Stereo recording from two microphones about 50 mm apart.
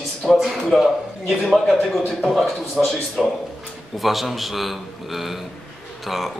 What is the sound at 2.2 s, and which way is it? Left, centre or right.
Speech, centre.